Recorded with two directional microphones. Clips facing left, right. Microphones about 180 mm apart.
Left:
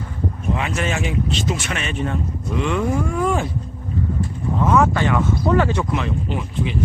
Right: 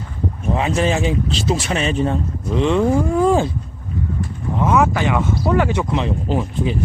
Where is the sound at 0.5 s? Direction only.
30° right (ahead or behind).